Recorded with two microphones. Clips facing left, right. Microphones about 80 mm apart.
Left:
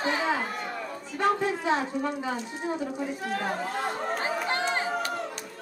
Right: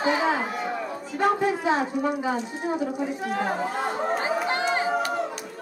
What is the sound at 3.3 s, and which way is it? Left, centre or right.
Chatter, centre.